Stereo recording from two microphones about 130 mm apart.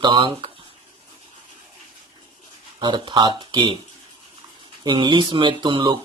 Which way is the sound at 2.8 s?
35° right (ahead or behind).